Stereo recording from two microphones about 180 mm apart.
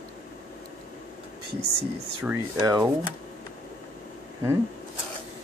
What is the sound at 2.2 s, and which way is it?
Speech, 15° right (ahead or behind).